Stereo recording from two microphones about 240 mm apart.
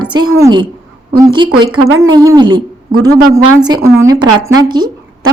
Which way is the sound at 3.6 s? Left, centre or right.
Centre.